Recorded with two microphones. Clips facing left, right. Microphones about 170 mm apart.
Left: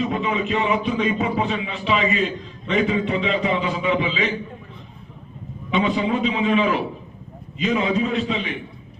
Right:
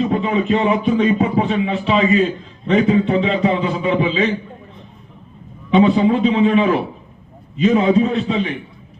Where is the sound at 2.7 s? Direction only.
35° right (ahead or behind).